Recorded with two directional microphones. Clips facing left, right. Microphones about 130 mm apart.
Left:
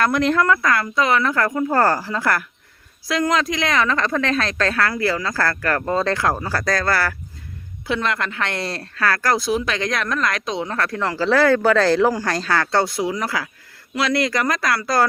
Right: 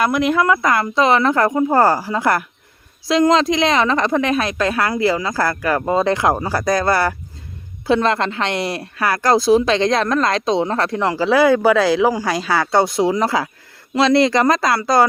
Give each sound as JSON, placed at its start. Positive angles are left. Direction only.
{"t": 0.0, "sound": "speech", "side_deg": -10}
{"t": 7.9, "sound": "speech", "side_deg": -30}
{"t": 9.3, "sound": "speech", "side_deg": -30}